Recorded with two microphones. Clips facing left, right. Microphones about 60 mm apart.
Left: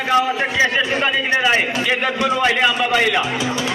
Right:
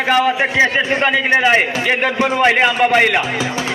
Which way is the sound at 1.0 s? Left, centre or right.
Right.